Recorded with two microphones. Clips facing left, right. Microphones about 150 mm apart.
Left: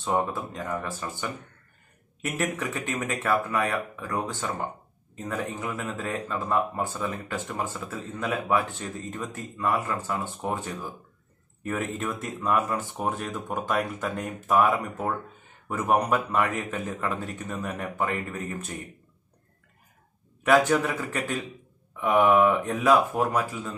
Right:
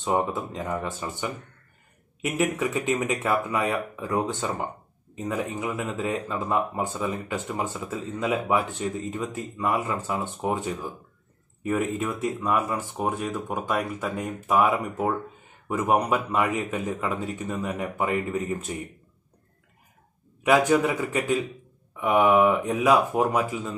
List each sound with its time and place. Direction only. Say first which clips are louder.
0.0 s speech: right 2 dB; 20° right (ahead or behind)
2.4 s speech: right 5 dB; 15° right (ahead or behind)
20.4 s speech: right 1 dB; 10° right (ahead or behind)